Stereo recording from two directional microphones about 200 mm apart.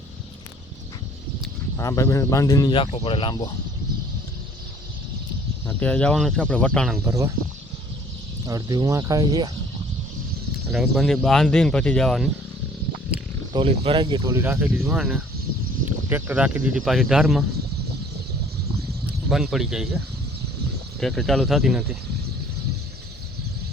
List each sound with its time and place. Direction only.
1.7 s speech: 15° left (ahead or behind)
5.6 s speech: 5° left (ahead or behind)
7.0 s speech: 15° right (ahead or behind)
8.4 s speech: 15° right (ahead or behind)
10.7 s speech: centre (ahead or behind)
13.5 s speech: 25° right (ahead or behind)
14.9 s speech: centre (ahead or behind)
19.3 s speech: centre (ahead or behind)
21.0 s speech: centre (ahead or behind)